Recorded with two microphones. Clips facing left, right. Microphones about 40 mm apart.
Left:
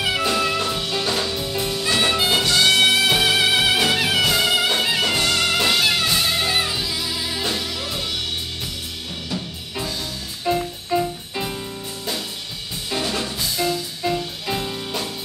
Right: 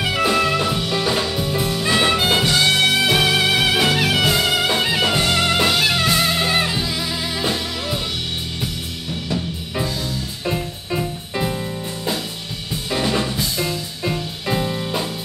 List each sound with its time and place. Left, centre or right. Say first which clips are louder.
0.1 s music: right 6 dB; centre
1.8 s music: right 2 dB; centre
10.4 s music: left 4 dB; centre
12.9 s music: right 4 dB; centre